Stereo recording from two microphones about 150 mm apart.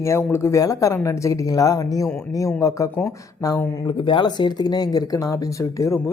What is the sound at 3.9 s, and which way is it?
A woman's voice, 35° left (ahead or behind).